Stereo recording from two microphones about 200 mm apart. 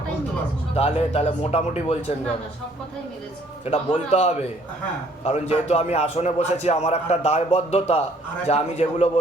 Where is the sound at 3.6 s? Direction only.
30° left (ahead or behind).